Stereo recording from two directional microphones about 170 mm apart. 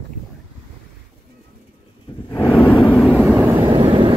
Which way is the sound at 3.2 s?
10° right (ahead or behind).